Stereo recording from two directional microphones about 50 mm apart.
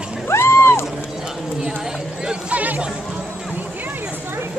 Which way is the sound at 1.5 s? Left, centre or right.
Centre.